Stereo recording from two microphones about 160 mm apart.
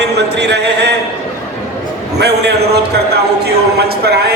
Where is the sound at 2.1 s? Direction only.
90° right.